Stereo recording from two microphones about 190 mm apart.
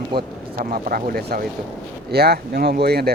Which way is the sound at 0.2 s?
50° right (ahead or behind).